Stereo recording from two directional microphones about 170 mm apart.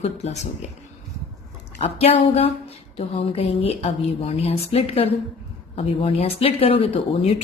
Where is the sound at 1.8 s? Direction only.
35° left (ahead or behind).